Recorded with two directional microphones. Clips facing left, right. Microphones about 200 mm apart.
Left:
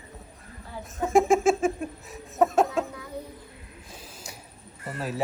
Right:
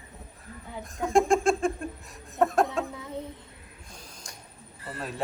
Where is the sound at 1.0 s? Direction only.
5° left (ahead or behind).